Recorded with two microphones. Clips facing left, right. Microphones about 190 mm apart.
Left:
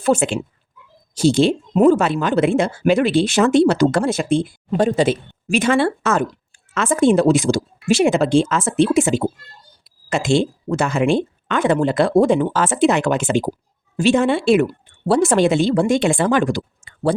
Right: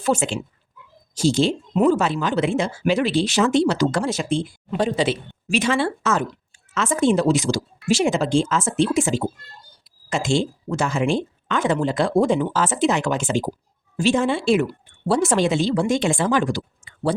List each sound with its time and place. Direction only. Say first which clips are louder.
0.0 s speech: left 4 dB; 55° left (ahead or behind)